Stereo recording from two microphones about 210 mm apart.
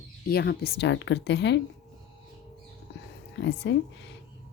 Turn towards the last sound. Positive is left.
turn(degrees=55)  # may be behind; listen again after turning